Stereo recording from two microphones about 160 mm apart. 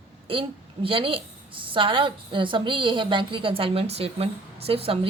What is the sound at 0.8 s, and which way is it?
A woman's voice, 35° right (ahead or behind).